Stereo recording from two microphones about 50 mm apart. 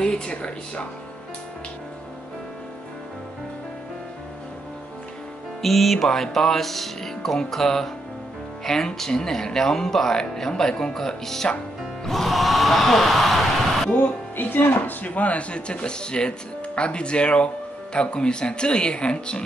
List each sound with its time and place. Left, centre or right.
0.0 s speech: centre
5.6 s speech: centre
13.9 s speech: left